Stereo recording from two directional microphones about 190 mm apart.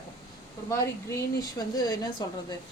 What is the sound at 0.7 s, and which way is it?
Speech, 15° left (ahead or behind).